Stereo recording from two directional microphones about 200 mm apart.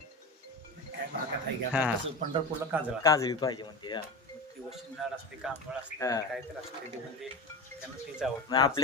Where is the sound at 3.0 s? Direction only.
15° left (ahead or behind).